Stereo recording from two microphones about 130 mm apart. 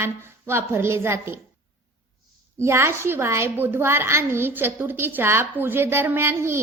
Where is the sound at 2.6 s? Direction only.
20° right (ahead or behind).